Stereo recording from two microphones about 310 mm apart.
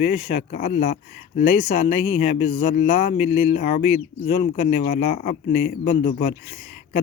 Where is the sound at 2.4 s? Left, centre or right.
Left.